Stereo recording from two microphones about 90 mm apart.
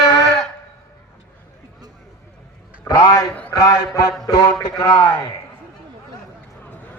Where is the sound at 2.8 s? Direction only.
50° left (ahead or behind).